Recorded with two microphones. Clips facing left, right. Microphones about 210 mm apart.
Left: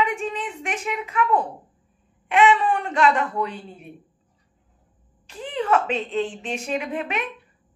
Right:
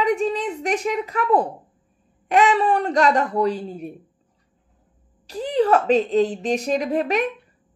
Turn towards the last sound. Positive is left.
turn(degrees=-40)  # may be behind; listen again after turning